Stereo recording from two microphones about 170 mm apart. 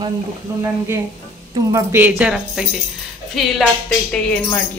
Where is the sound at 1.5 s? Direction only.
15° right (ahead or behind).